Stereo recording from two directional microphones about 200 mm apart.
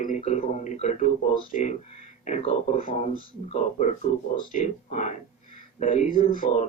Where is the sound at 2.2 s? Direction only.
35° left (ahead or behind).